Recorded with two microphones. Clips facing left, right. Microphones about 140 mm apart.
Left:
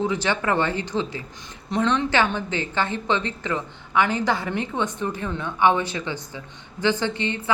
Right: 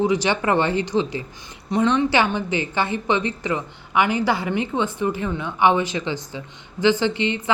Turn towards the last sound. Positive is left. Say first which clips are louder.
# right 4 dB
turn(degrees=-15)  # may be behind; listen again after turning